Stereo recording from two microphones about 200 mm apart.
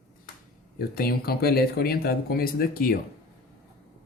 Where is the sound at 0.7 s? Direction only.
50° left (ahead or behind).